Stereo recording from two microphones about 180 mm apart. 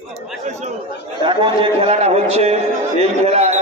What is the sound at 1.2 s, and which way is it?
A man's voice, 25° right (ahead or behind).